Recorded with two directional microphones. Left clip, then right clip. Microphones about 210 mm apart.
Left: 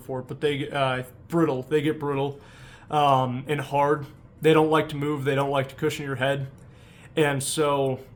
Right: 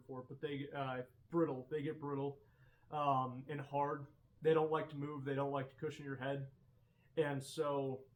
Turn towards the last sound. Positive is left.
turn(degrees=50)  # may be behind; listen again after turning